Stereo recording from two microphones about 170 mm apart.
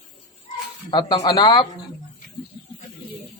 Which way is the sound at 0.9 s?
25° left (ahead or behind).